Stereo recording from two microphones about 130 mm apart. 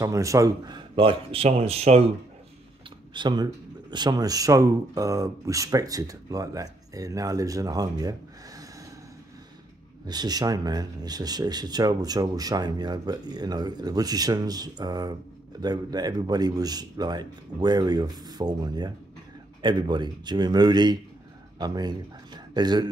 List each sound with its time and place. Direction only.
0.0 s a man's voice: 25° right (ahead or behind); by 2.0 s 50° right (ahead or behind)
3.1 s speech: 35° right (ahead or behind)
10.0 s speech: 30° right (ahead or behind)